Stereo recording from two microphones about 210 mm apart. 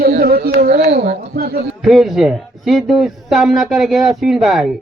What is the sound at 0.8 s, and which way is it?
Speech, 30° right (ahead or behind).